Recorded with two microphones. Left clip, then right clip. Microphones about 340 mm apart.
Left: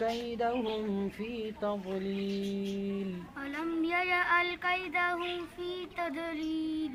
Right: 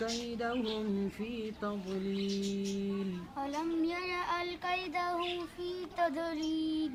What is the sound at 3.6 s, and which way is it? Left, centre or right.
Child singing, centre.